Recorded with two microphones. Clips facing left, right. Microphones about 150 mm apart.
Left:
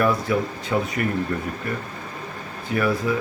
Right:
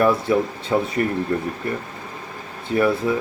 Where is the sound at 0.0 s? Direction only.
25° right (ahead or behind).